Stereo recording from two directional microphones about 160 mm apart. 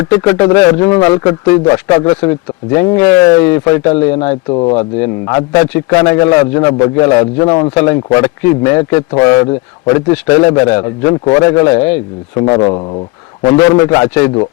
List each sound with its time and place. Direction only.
0.0 s a man's voice: 20° left (ahead or behind)
2.9 s speech: 10° left (ahead or behind)
4.4 s speech: 30° left (ahead or behind)
4.7 s a man's voice: 15° left (ahead or behind)
7.7 s a man's voice: 15° left (ahead or behind)
12.5 s a man's voice: 30° left (ahead or behind)